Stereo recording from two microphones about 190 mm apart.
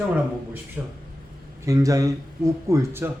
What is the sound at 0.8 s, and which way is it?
Speech, 5° right (ahead or behind).